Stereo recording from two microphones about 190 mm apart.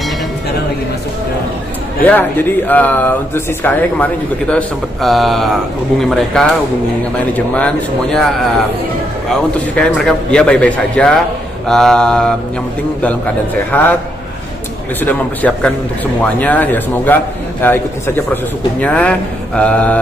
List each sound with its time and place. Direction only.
2.0 s a man's voice: 10° left (ahead or behind)
9.3 s a man's voice: 5° left (ahead or behind)
13.7 s a man's voice: 10° left (ahead or behind)
15.0 s a man's voice: 10° left (ahead or behind)